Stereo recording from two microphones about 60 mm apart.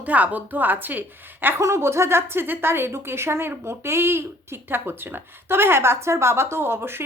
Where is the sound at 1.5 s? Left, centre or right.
Right.